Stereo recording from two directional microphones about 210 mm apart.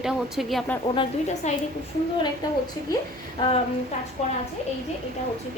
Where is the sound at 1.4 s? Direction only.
35° left (ahead or behind).